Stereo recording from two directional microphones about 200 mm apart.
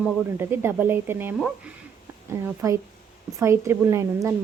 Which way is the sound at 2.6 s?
15° right (ahead or behind).